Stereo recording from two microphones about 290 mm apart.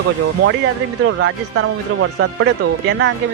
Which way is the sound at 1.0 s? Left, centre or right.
Right.